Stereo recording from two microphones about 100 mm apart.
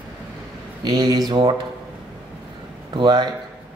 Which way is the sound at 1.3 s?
65° right (ahead or behind).